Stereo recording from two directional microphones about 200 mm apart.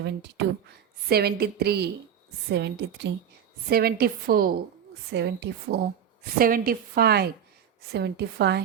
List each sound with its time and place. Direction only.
0.0 s a woman's voice: 60° right (ahead or behind)
5.1 s a woman's voice: 60° right (ahead or behind)